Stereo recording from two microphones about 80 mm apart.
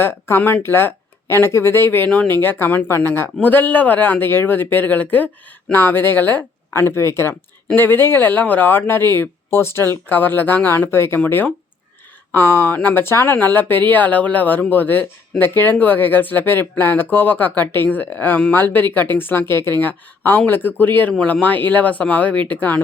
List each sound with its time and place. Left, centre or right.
0.0 s speech: left
21.1 s speech: centre